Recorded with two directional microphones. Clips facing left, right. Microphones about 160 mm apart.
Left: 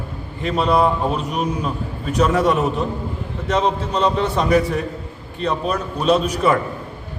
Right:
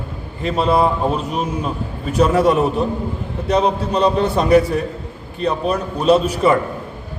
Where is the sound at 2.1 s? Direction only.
30° right (ahead or behind).